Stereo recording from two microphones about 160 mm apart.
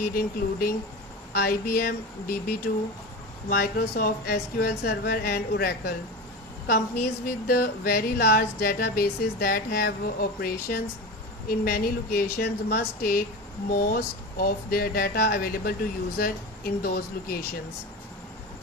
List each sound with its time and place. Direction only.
0.0 s a woman's voice: 65° left (ahead or behind)
12.4 s a woman's voice: 90° left; by 17.4 s 70° left (ahead or behind)